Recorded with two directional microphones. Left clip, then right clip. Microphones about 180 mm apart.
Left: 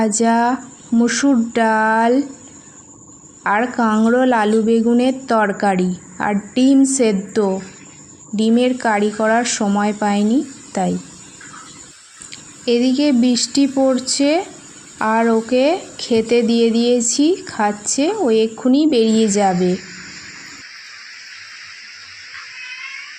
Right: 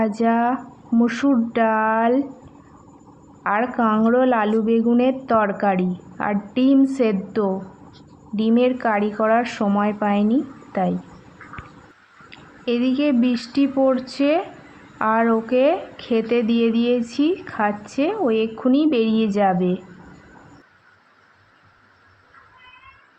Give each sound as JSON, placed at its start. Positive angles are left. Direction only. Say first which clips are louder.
{"t": 0.0, "sound": "speech", "louder": "left 4 dB", "side_deg": 25}
{"t": 3.4, "sound": "speech", "louder": "left 3 dB", "side_deg": 25}
{"t": 12.6, "sound": "speech", "louder": "left 5 dB", "side_deg": 25}